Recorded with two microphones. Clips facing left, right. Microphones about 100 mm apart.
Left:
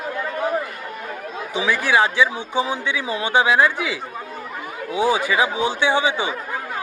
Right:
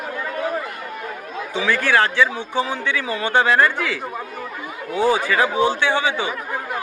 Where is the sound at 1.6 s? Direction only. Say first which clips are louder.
Even; 10° left (ahead or behind).